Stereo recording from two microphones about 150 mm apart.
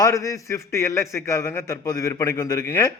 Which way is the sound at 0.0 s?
20° left (ahead or behind).